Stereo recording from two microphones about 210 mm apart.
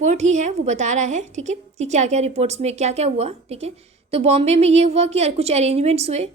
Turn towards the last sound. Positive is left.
turn(degrees=-30)  # may be behind; listen again after turning